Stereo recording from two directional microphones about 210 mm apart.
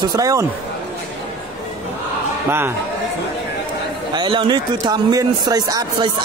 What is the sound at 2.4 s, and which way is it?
Speech, 10° right (ahead or behind).